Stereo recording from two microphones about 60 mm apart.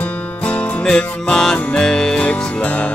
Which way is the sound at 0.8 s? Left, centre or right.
Centre.